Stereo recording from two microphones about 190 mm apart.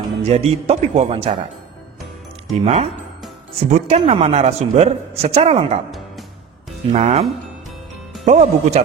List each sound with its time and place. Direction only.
0.2 s speech: 30° right (ahead or behind)
2.6 s speech: 35° right (ahead or behind)
5.9 s music: centre (ahead or behind)
6.9 s speech: 35° right (ahead or behind)
8.3 s speech: 35° right (ahead or behind)